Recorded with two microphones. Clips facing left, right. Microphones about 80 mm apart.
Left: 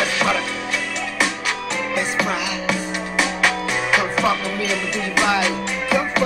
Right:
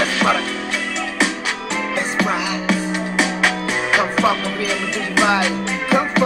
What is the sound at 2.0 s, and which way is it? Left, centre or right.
Music, right.